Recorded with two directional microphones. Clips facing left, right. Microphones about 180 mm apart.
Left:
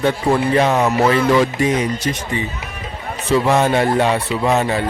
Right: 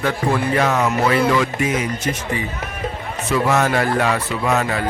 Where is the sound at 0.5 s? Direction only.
20° left (ahead or behind).